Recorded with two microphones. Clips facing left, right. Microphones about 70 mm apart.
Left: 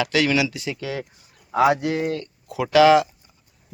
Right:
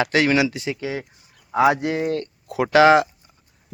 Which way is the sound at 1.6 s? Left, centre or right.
Right.